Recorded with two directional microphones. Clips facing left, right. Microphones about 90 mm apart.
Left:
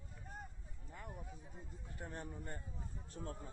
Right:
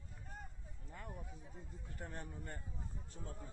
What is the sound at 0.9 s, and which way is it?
Speech, 5° left (ahead or behind).